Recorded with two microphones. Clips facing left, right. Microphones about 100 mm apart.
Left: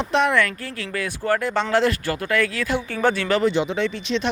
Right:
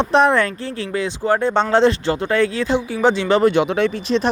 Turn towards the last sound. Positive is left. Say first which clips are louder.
# right 5 dB
turn(degrees=-40)  # may be behind; listen again after turning